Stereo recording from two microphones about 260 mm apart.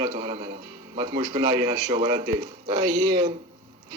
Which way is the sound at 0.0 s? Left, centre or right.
Centre.